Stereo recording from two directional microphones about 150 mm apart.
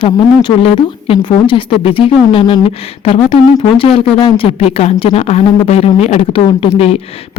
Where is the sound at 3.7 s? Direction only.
40° left (ahead or behind).